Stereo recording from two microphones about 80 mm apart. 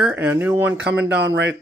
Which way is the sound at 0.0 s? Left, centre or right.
Centre.